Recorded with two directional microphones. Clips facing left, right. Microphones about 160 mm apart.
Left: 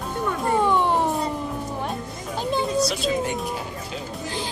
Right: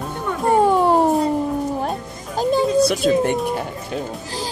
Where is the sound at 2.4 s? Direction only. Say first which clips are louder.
Right 7 dB; 40° right (ahead or behind).